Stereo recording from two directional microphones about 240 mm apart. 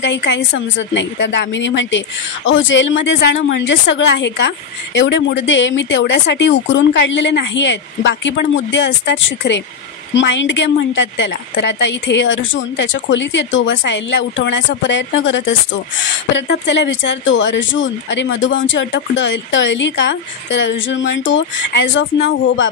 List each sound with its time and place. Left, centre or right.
0.0 s a woman's voice: left